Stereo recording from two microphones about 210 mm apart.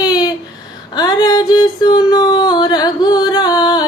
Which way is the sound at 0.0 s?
20° left (ahead or behind).